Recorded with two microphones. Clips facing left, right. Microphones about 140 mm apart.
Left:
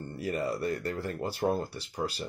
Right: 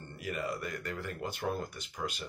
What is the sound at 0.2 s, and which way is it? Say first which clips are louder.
Speech: left 5 dB; 35° left (ahead or behind).